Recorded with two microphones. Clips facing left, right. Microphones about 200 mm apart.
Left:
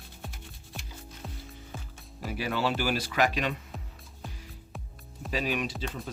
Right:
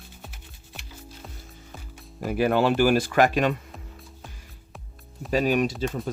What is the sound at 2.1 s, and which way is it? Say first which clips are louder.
Speech: right 10 dB; 50° right (ahead or behind).